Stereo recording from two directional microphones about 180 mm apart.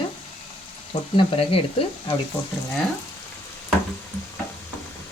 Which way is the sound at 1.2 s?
30° left (ahead or behind).